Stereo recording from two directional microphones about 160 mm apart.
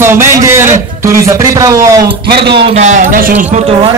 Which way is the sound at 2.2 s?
85° right.